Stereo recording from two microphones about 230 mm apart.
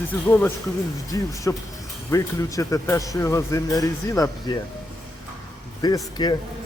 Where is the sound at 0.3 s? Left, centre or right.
Centre.